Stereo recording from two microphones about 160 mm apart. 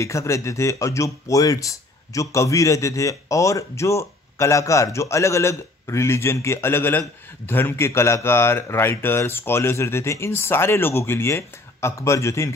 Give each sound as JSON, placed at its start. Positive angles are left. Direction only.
{"t": 0.0, "sound": "speech", "side_deg": 20}